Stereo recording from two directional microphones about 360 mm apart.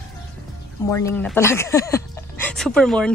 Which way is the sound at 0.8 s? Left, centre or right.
Centre.